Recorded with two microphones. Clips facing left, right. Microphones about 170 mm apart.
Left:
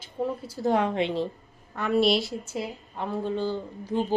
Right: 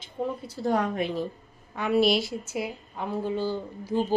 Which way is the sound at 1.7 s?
Centre (ahead or behind).